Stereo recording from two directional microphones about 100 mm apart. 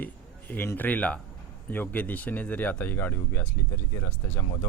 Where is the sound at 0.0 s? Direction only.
20° left (ahead or behind).